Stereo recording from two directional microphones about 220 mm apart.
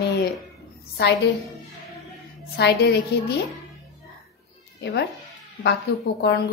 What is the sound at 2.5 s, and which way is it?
Speech, 50° left (ahead or behind).